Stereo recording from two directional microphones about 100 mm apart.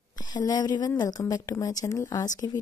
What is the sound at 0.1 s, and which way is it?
A woman's voice, 40° left (ahead or behind).